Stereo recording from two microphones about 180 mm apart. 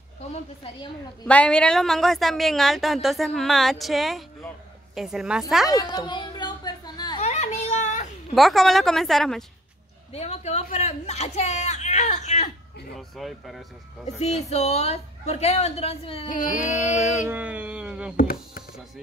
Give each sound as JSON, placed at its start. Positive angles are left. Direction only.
{"t": 1.2, "sound": "a woman's voice", "side_deg": 5}
{"t": 5.7, "sound": "a sound", "side_deg": 20}
{"t": 7.2, "sound": "children playing", "side_deg": 40}
{"t": 8.4, "sound": "a woman's voice", "side_deg": 0}
{"t": 10.1, "sound": "a woman's voice", "side_deg": 35}
{"t": 12.9, "sound": "a woman's voice", "side_deg": 0}
{"t": 14.5, "sound": "a woman's voice", "side_deg": 35}
{"t": 16.3, "sound": "a sound", "side_deg": 45}
{"t": 17.3, "sound": "speech", "side_deg": -10}
{"t": 18.1, "sound": "a sound", "side_deg": 55}